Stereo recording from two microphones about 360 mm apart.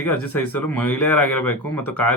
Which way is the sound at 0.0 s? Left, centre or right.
Centre.